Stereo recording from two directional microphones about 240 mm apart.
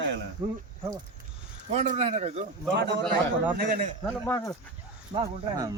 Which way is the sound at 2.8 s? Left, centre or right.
Right.